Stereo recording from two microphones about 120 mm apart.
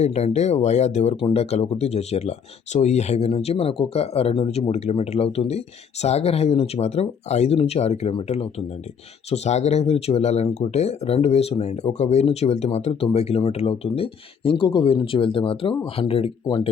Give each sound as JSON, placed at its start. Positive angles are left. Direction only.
{"t": 0.0, "sound": "speech", "side_deg": 65}
{"t": 1.1, "sound": "speech", "side_deg": 50}
{"t": 2.7, "sound": "speech", "side_deg": 75}